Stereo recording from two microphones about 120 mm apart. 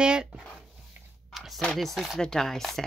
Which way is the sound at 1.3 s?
Centre (ahead or behind).